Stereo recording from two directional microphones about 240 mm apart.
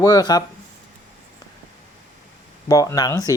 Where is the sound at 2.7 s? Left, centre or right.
Centre.